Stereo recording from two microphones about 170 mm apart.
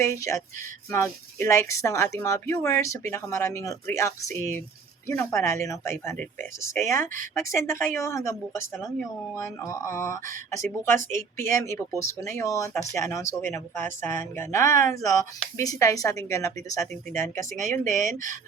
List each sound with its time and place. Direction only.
0.0 s speech: 15° left (ahead or behind)